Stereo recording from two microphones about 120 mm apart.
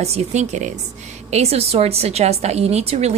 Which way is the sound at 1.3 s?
60° right (ahead or behind).